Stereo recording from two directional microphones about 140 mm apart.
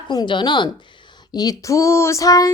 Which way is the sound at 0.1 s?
35° left (ahead or behind).